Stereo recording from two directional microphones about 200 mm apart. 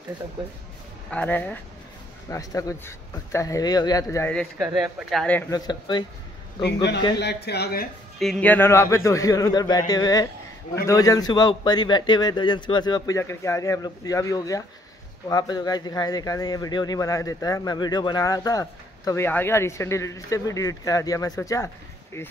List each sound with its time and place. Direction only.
1.1 s a man's voice: 10° left (ahead or behind)
4.3 s speech: 5° left (ahead or behind)
4.6 s speech: 10° right (ahead or behind)
5.1 s a man's voice: 5° left (ahead or behind)
5.5 s speech: 20° left (ahead or behind)
6.6 s speech: 60° left (ahead or behind)
8.2 s a man's voice: 5° left (ahead or behind)